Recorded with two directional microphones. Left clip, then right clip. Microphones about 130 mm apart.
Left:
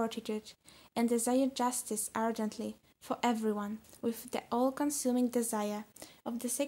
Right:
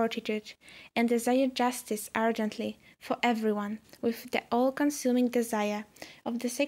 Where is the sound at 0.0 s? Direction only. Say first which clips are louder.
Right 6 dB; 15° right (ahead or behind).